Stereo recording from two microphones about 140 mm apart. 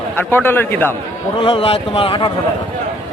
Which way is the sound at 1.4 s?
45° left (ahead or behind).